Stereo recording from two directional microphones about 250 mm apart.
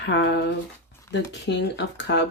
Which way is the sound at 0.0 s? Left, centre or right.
Left.